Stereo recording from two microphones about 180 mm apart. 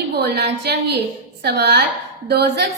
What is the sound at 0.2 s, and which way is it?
A woman's voice, 65° right (ahead or behind).